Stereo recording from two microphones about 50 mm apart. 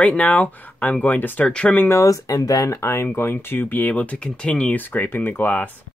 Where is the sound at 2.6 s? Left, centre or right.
Left.